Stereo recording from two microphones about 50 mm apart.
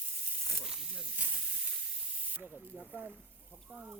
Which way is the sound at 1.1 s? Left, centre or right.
Right.